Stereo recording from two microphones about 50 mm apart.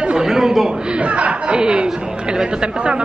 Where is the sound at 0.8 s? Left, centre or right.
Right.